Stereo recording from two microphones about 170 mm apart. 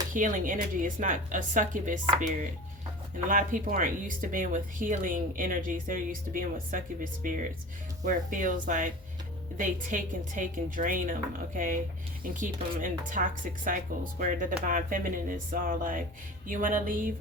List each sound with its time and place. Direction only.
0.1 s speech: 50° right (ahead or behind)
3.2 s speech: 50° right (ahead or behind)